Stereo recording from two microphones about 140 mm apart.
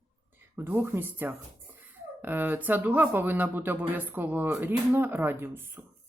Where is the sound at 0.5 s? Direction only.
15° right (ahead or behind).